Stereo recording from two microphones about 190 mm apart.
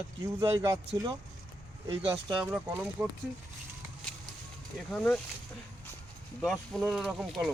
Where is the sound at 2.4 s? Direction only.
5° right (ahead or behind).